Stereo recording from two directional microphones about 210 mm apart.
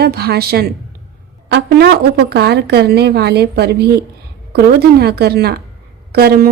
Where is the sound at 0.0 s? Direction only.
50° right (ahead or behind).